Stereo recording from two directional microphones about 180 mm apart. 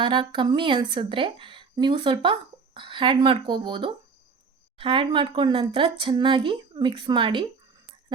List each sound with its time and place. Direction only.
0.0 s speech: 25° right (ahead or behind)